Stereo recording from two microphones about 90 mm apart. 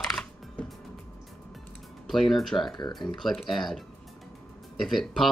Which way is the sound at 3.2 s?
Centre (ahead or behind).